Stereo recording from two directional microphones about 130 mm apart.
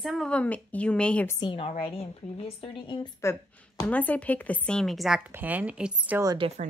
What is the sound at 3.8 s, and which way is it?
Speech, 10° left (ahead or behind).